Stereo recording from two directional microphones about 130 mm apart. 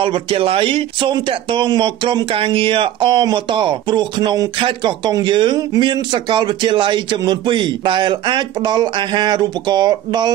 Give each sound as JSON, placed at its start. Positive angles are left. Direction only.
{"t": 0.0, "sound": "speech", "side_deg": -45}